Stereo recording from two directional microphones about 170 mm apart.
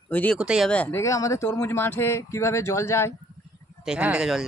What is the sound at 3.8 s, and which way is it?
Speech, 5° right (ahead or behind).